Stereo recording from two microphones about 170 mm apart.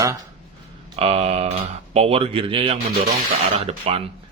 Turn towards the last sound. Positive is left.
turn(degrees=-35)  # may be behind; listen again after turning